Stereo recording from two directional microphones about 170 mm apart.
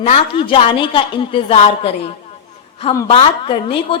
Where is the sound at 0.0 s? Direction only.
35° left (ahead or behind).